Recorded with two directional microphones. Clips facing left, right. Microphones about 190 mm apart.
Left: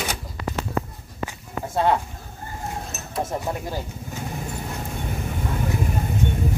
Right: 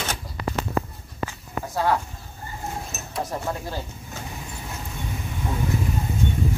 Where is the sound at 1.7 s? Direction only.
25° left (ahead or behind).